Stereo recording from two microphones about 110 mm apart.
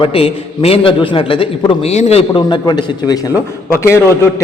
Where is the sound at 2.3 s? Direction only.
45° left (ahead or behind).